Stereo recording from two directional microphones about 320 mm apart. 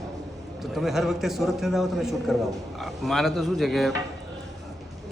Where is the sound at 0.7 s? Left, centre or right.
Centre.